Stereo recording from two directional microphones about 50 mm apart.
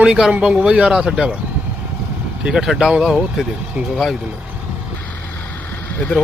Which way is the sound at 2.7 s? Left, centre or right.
Centre.